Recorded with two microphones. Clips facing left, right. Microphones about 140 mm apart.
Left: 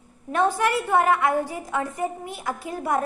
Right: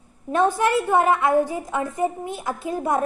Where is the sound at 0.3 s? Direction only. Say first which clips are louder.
Right 2 dB; 20° right (ahead or behind).